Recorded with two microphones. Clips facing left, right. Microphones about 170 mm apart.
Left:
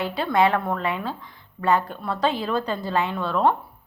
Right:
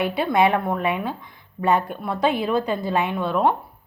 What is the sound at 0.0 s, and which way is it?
A woman's voice, 20° right (ahead or behind).